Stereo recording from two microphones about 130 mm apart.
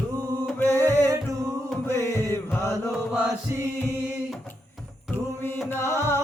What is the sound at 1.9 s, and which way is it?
Chant, 25° right (ahead or behind).